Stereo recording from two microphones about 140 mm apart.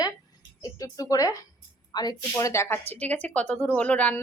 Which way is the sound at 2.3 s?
20° left (ahead or behind).